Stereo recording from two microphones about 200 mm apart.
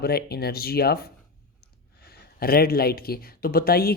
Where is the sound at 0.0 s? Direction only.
50° left (ahead or behind).